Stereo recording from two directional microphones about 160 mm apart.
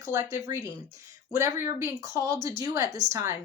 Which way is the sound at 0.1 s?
20° right (ahead or behind).